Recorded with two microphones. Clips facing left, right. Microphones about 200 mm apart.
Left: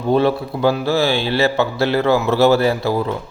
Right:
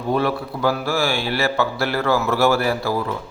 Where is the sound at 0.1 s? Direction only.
25° left (ahead or behind).